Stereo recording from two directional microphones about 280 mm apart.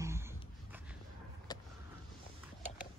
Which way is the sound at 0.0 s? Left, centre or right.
Centre.